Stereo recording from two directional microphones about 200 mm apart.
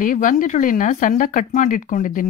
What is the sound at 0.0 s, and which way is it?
Speech, 40° left (ahead or behind).